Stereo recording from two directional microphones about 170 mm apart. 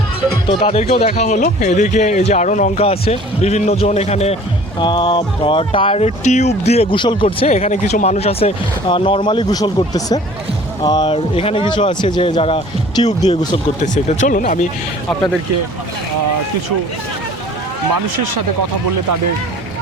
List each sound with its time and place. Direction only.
0.6 s speech: 35° left (ahead or behind)
4.8 s speech: 25° left (ahead or behind)
13.2 s speech: 25° left (ahead or behind)
13.7 s speech: 45° left (ahead or behind)